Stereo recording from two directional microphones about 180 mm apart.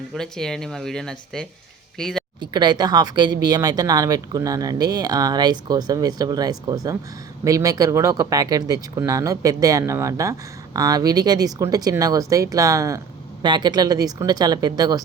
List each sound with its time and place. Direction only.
0.1 s speech: 5° left (ahead or behind)
2.4 s speech: 25° right (ahead or behind)